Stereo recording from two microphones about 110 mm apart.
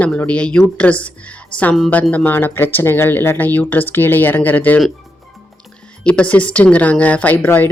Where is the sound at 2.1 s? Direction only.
15° left (ahead or behind).